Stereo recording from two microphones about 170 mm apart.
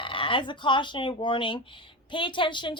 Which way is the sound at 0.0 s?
30° left (ahead or behind).